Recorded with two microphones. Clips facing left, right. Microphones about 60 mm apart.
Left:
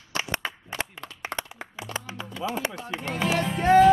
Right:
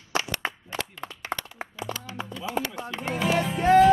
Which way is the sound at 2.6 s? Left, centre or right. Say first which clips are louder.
Right 4 dB; right.